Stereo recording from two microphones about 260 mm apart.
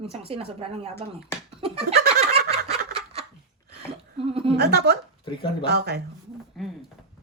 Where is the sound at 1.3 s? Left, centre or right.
Centre.